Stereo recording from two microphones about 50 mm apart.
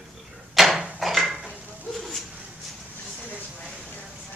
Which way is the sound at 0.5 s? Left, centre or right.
Centre.